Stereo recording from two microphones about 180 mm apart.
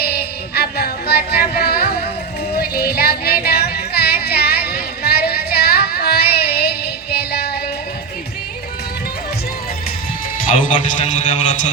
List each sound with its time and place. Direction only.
0.5 s music: 60° left (ahead or behind)
10.3 s a man's voice: 45° left (ahead or behind)